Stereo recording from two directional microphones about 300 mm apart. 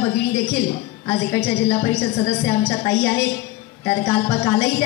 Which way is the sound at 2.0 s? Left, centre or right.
Centre.